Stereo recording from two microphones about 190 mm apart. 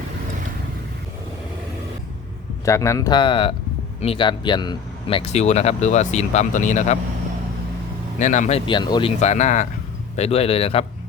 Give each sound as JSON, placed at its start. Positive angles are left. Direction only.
{"t": 2.6, "sound": "speech", "side_deg": 15}
{"t": 8.2, "sound": "speech", "side_deg": 40}